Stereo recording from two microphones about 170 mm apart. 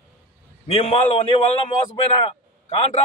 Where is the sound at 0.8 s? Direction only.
35° left (ahead or behind).